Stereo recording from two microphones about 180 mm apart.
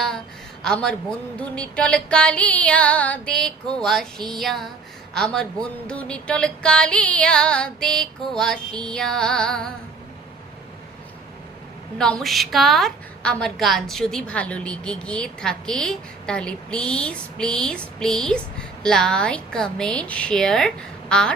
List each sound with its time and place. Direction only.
0.6 s a woman's voice: 5° left (ahead or behind)
11.9 s a woman's voice: 5° left (ahead or behind)